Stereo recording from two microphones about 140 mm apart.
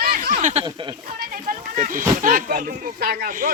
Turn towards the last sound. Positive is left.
turn(degrees=-85)